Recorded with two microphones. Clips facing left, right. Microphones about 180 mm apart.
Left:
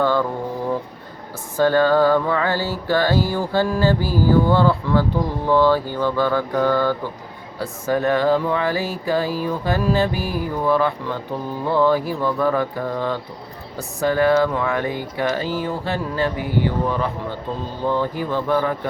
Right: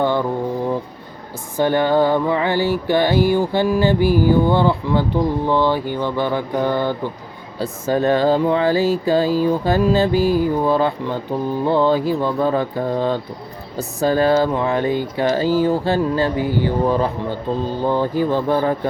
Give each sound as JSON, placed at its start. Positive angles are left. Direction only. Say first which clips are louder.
{"t": 0.0, "sound": "mantra", "louder": "right 1 dB", "side_deg": -20}
{"t": 1.5, "sound": "speech", "louder": "even", "side_deg": -20}